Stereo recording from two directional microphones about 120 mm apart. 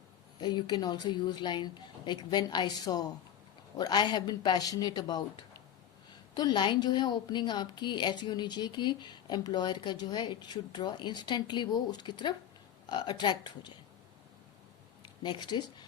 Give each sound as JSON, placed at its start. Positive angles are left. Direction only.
{"t": 0.3, "sound": "a woman's voice", "side_deg": 35}
{"t": 6.3, "sound": "a woman's voice", "side_deg": 40}
{"t": 15.2, "sound": "speech", "side_deg": 40}